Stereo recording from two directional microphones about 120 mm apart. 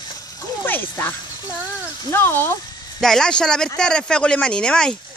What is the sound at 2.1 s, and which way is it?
Speech, 20° left (ahead or behind).